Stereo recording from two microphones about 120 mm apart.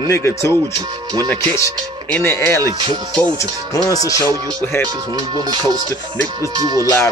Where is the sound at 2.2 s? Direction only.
20° left (ahead or behind).